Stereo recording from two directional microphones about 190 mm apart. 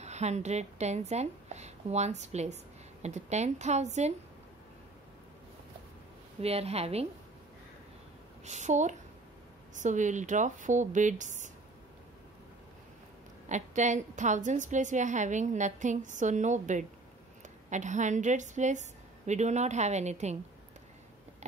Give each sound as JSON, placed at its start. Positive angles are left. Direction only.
{"t": 0.0, "sound": "a woman's voice", "side_deg": -35}
{"t": 6.4, "sound": "a woman's voice", "side_deg": -35}
{"t": 8.5, "sound": "a woman's voice", "side_deg": -40}
{"t": 13.5, "sound": "a woman's voice", "side_deg": -40}